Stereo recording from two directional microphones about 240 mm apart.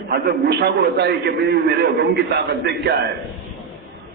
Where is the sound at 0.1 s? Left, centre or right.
Right.